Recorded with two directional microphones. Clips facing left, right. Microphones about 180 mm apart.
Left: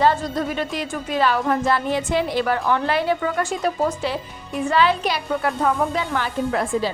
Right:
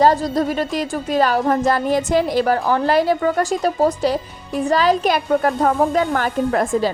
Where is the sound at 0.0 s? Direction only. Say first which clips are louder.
Right 4 dB; 35° right (ahead or behind).